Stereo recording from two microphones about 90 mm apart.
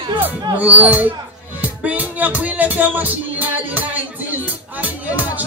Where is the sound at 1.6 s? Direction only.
15° right (ahead or behind).